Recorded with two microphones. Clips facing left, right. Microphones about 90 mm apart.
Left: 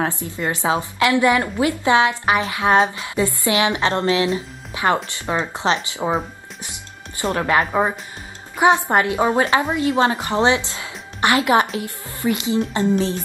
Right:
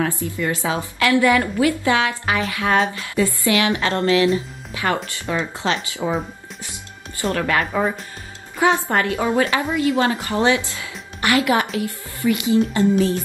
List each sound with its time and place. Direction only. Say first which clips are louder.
0.1 s a woman's voice: right 1 dB; 20° left (ahead or behind)